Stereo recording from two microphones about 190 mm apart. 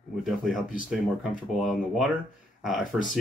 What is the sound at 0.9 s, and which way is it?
Speech, centre (ahead or behind).